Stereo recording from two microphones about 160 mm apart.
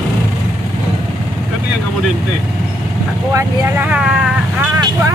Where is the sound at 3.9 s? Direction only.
5° right (ahead or behind).